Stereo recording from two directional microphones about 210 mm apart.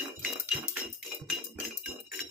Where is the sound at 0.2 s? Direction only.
5° right (ahead or behind).